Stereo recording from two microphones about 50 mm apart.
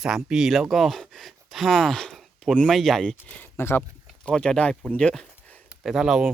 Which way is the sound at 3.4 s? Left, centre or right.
Left.